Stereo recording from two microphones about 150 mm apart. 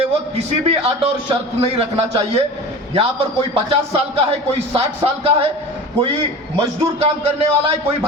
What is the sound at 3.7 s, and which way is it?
A man's voice, 40° right (ahead or behind).